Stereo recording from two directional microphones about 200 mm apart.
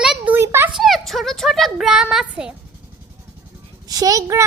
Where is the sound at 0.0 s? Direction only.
5° right (ahead or behind).